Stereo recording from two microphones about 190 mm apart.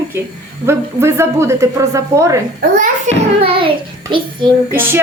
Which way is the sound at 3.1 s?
35° right (ahead or behind).